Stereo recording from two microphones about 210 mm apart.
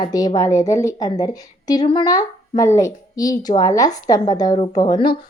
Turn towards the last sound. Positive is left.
turn(degrees=20)  # may be behind; listen again after turning